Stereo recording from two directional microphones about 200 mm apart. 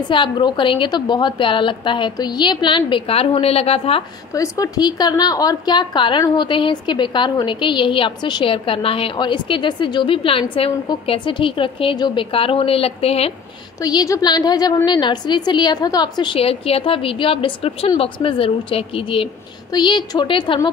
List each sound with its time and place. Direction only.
0.1 s a woman's voice: 25° left (ahead or behind)
4.3 s a woman's voice: 15° left (ahead or behind)
13.7 s a woman's voice: 20° left (ahead or behind)